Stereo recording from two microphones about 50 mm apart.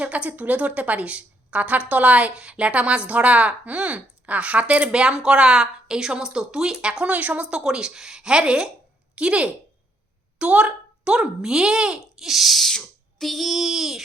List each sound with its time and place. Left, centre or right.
0.0 s a woman's voice: right
7.5 s a woman's voice: centre
12.3 s owl: centre